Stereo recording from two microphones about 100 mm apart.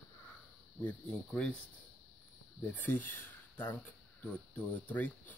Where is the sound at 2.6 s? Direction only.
15° left (ahead or behind).